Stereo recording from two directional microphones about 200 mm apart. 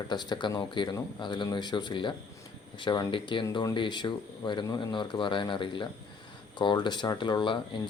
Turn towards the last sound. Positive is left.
turn(degrees=25)  # may be behind; listen again after turning